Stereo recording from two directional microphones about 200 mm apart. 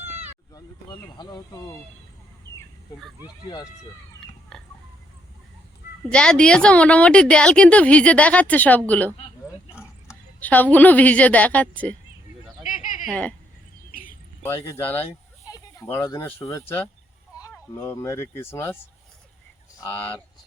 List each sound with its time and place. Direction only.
0.0 s cat: 30° right (ahead or behind)
0.5 s speech: 20° left (ahead or behind)
4.5 s a sound: centre (ahead or behind)
6.1 s a woman's voice: 5° left (ahead or behind)
10.4 s a woman's voice: 10° left (ahead or behind)
12.6 s a sound: 40° left (ahead or behind)
13.1 s speech: 5° left (ahead or behind)
13.9 s bird: 45° left (ahead or behind)
14.4 s a woman's voice: 10° left (ahead or behind)
19.8 s a woman's voice: 10° left (ahead or behind)